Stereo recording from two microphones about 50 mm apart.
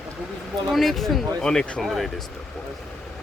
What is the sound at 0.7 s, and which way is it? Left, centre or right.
Speech, centre.